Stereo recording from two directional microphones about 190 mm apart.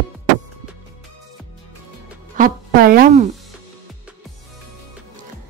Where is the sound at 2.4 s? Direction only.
50° right (ahead or behind).